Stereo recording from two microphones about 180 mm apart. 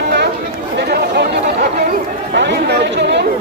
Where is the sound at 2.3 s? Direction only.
75° right (ahead or behind).